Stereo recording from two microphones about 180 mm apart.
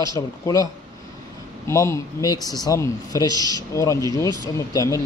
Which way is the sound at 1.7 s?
15° left (ahead or behind).